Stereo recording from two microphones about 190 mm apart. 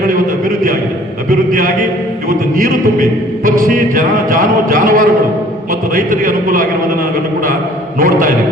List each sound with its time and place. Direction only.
1.3 s a man's voice: 45° right (ahead or behind)
2.6 s music: 45° right (ahead or behind)
7.9 s music: 45° right (ahead or behind)